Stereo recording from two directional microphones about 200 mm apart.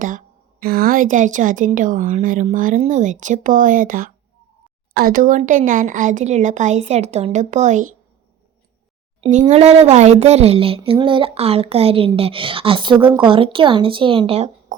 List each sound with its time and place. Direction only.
0.6 s a woman's voice: 50° right (ahead or behind)
9.2 s speech: 35° right (ahead or behind)